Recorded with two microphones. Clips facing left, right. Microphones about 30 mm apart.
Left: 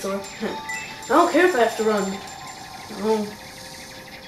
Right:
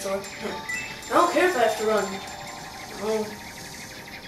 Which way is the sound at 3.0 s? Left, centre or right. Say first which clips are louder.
Left 5 dB; left.